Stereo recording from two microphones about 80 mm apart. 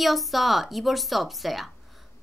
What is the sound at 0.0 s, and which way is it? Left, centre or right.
A woman's voice, centre.